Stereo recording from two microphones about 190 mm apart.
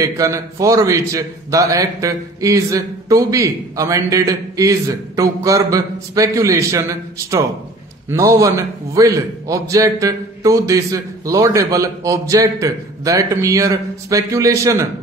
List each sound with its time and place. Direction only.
0.0 s a man's voice: 15° right (ahead or behind)